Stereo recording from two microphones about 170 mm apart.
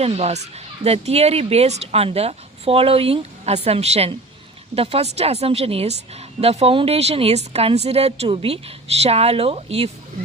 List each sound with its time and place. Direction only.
0.0 s speech: 40° right (ahead or behind)